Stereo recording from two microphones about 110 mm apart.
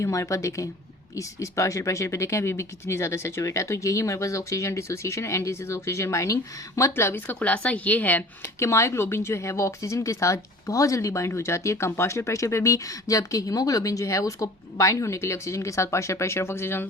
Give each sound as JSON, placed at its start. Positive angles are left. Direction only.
{"t": 0.0, "sound": "speech", "side_deg": 30}
{"t": 8.5, "sound": "speech", "side_deg": 25}